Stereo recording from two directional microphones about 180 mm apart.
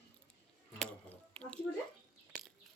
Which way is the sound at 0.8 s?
5° left (ahead or behind).